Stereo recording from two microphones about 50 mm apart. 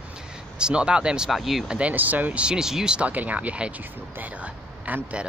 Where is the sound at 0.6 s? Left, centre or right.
Centre.